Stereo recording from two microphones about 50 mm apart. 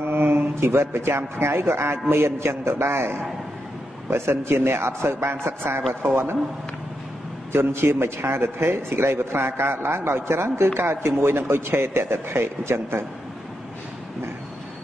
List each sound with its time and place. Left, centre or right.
0.0 s a man's voice: right
7.5 s a man's voice: right